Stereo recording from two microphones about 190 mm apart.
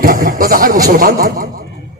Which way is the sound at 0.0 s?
40° right (ahead or behind).